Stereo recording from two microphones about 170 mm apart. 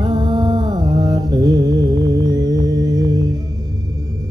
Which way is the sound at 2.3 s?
20° right (ahead or behind).